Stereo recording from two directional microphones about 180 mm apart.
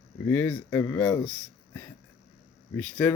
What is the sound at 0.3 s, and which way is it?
Speech, 10° left (ahead or behind).